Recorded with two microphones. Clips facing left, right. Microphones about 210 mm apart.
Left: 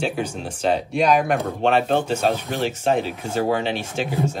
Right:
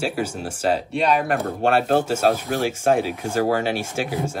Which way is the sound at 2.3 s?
45° right (ahead or behind).